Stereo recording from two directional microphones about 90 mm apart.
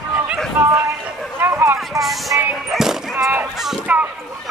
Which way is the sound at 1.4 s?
25° right (ahead or behind).